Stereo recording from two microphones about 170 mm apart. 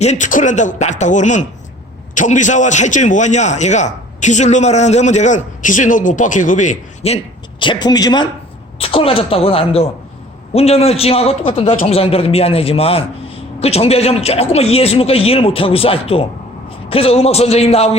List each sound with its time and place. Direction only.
0.0 s a man's voice: 45° left (ahead or behind)
7.6 s speech: 25° left (ahead or behind)
8.8 s a man's voice: 35° left (ahead or behind)